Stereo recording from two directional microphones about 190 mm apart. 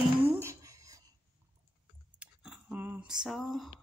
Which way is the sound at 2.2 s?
5° right (ahead or behind).